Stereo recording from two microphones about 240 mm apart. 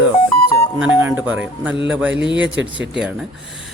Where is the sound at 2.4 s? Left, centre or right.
Right.